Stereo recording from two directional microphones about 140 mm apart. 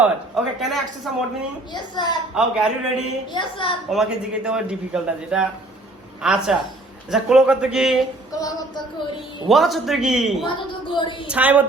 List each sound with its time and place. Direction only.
0.3 s speech: centre (ahead or behind)
1.7 s a woman's voice: 30° left (ahead or behind)
2.3 s speech: 5° right (ahead or behind)
3.3 s a woman's voice: 40° left (ahead or behind)
3.8 s speech: 5° right (ahead or behind)
8.3 s a sound: 25° left (ahead or behind)
9.5 s speech: centre (ahead or behind)
10.4 s a woman's voice: 35° left (ahead or behind)
11.3 s a woman's voice: 10° right (ahead or behind)